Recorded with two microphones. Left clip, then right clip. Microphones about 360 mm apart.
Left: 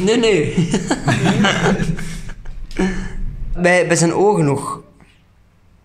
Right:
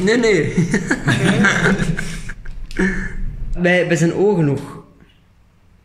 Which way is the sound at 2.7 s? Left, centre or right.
Centre.